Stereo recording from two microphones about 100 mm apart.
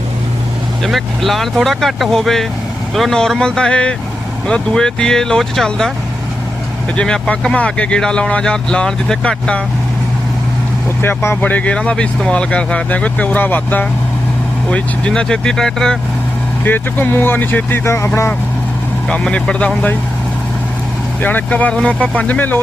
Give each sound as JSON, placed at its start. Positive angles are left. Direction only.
{"t": 0.8, "sound": "speech", "side_deg": 0}
{"t": 6.9, "sound": "speech", "side_deg": 10}
{"t": 11.0, "sound": "speech", "side_deg": 25}
{"t": 16.6, "sound": "speech", "side_deg": 20}
{"t": 19.0, "sound": "speech", "side_deg": 10}
{"t": 21.2, "sound": "speech", "side_deg": 15}